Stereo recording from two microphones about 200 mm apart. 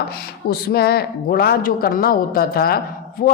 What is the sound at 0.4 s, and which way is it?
A woman's voice, 50° left (ahead or behind).